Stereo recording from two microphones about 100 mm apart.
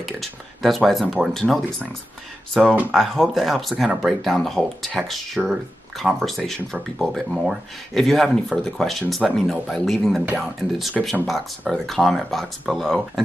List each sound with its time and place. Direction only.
0.0 s speech: centre (ahead or behind)
2.6 s speech: 15° right (ahead or behind)
2.9 s speech: centre (ahead or behind)